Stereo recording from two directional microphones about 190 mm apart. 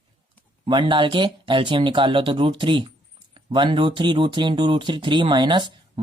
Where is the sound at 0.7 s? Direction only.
25° right (ahead or behind).